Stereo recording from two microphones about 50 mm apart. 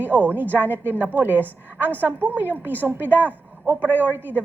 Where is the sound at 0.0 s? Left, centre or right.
Right.